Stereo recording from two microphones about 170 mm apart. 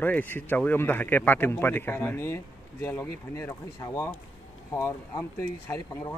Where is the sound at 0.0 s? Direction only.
10° left (ahead or behind).